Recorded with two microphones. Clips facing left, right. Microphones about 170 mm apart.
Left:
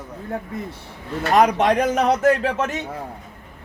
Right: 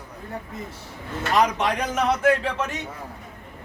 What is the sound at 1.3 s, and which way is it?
Speech, 55° left (ahead or behind).